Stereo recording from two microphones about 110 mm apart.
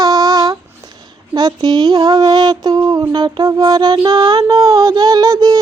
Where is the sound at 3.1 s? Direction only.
40° right (ahead or behind).